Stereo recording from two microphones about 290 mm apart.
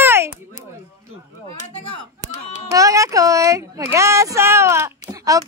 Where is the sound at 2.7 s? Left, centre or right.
Centre.